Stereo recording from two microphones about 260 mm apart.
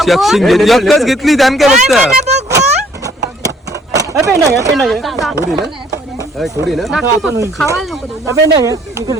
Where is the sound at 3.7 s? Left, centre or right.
Centre.